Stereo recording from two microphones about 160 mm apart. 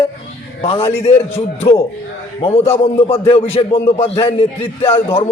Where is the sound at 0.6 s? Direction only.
35° left (ahead or behind).